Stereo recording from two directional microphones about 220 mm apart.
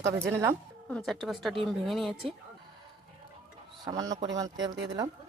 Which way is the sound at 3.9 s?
15° right (ahead or behind).